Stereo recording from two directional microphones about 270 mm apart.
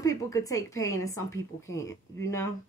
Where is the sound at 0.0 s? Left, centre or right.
Centre.